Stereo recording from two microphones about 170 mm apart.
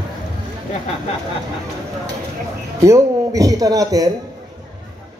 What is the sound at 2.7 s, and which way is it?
A man's voice, 20° right (ahead or behind).